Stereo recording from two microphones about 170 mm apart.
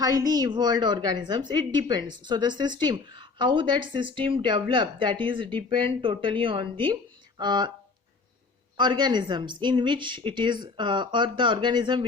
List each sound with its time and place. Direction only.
0.0 s a woman's voice: 20° right (ahead or behind)
8.8 s a woman's voice: 25° right (ahead or behind)